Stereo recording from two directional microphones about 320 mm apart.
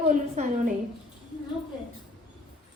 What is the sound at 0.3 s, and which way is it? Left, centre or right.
Speech, right.